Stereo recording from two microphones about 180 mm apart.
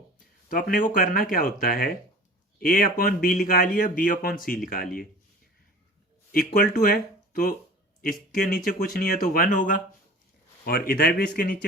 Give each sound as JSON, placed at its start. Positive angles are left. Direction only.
{"t": 0.4, "sound": "speech", "side_deg": 50}
{"t": 6.3, "sound": "speech", "side_deg": 50}